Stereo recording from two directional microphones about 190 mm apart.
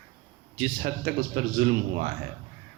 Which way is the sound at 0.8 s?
50° right (ahead or behind).